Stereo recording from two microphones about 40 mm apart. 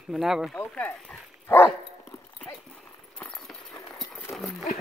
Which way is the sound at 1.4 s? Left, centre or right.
Left.